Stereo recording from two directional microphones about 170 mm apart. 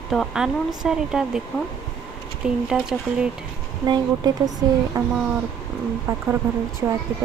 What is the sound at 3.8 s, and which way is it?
Speech, 25° right (ahead or behind).